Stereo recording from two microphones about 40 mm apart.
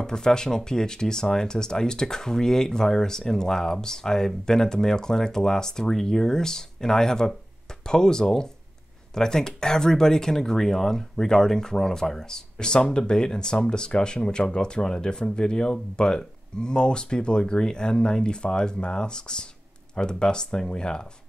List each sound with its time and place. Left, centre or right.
0.0 s speech: centre